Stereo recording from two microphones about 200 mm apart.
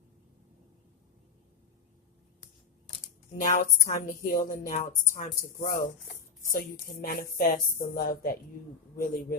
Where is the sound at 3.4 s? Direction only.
35° left (ahead or behind).